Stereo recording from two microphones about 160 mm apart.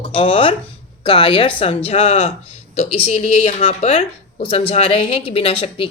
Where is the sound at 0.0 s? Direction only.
35° left (ahead or behind).